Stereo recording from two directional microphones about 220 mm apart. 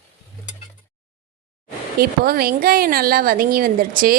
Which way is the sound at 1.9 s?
40° right (ahead or behind).